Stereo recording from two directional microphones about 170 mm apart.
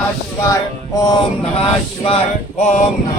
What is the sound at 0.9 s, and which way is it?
Mantra, 25° left (ahead or behind).